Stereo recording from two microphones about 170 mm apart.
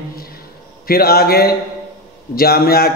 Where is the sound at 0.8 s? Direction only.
60° left (ahead or behind).